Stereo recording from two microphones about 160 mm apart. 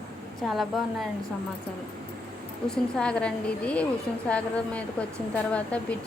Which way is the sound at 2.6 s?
5° left (ahead or behind).